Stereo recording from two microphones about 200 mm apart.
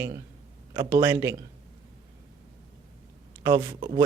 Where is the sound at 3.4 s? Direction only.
15° right (ahead or behind).